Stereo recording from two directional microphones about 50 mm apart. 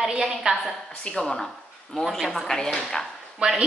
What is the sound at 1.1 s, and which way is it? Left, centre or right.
A woman's voice, centre.